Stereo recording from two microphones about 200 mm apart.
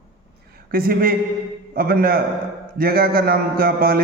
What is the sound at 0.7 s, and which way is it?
A man's voice, 45° right (ahead or behind).